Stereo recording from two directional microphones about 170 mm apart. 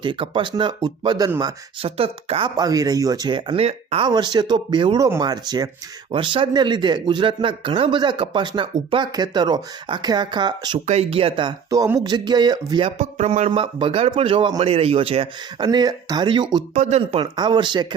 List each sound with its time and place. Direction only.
0.0 s speech: 30° right (ahead or behind)
2.6 s speech: 20° right (ahead or behind)
10.8 s speech: 35° right (ahead or behind)
13.0 s speech: 45° right (ahead or behind); by 16.6 s 25° right (ahead or behind)
16.7 s speech: 40° right (ahead or behind); by 17.8 s 25° right (ahead or behind)